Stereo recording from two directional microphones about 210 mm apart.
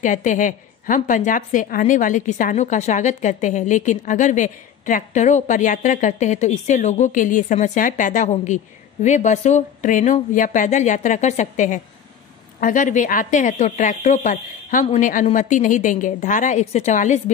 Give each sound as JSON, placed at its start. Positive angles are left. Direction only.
{"t": 0.0, "sound": "a woman's voice", "side_deg": 40}